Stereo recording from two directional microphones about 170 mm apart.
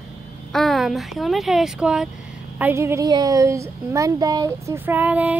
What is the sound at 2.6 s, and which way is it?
Speech, 15° right (ahead or behind).